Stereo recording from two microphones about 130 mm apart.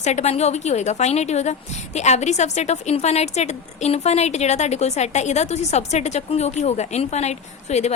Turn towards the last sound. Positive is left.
turn(degrees=60)  # may be behind; listen again after turning